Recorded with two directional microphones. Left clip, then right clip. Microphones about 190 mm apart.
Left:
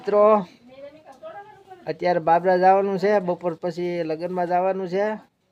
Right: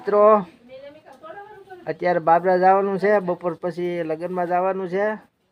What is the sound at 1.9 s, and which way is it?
Speech, centre (ahead or behind).